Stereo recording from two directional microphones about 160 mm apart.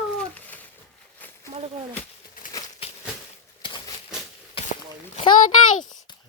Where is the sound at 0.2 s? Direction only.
10° left (ahead or behind).